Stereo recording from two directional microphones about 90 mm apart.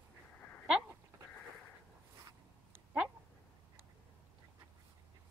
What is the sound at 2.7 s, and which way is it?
Dog, 20° right (ahead or behind).